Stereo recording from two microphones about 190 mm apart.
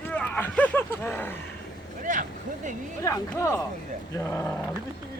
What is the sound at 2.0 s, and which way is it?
Speech, 45° right (ahead or behind).